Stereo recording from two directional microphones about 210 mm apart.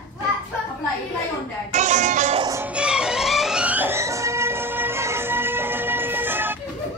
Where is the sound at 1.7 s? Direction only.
35° right (ahead or behind).